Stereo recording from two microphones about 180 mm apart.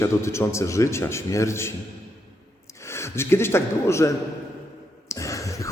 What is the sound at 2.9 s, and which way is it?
A man's voice, 15° left (ahead or behind).